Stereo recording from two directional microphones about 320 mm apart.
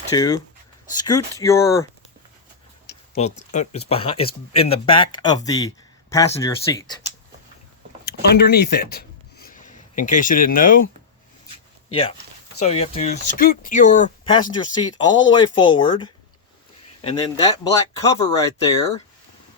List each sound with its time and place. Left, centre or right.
0.1 s speech: centre
3.2 s speech: left
8.0 s speech: left
12.5 s speech: centre